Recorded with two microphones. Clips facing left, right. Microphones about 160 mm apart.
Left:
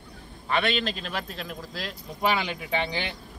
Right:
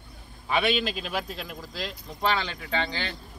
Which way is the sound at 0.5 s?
5° right (ahead or behind).